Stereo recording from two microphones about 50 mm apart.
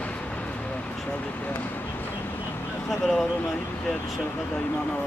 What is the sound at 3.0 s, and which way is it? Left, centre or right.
Speech, centre.